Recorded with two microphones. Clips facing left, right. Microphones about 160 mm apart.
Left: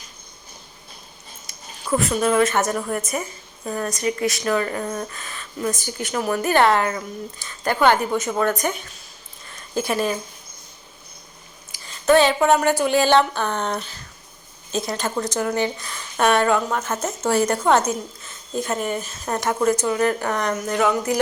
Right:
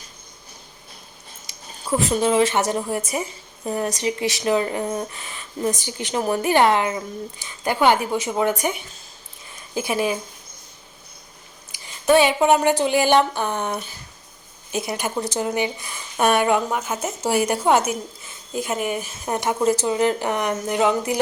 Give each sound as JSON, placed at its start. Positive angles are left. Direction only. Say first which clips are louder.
{"t": 2.0, "sound": "a woman's voice", "louder": "right 1 dB", "side_deg": -30}
{"t": 2.5, "sound": "speech", "louder": "even", "side_deg": -10}
{"t": 11.7, "sound": "a woman's voice", "louder": "even", "side_deg": -15}